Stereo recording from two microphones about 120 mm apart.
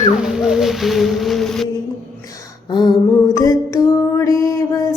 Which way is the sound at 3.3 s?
30° left (ahead or behind).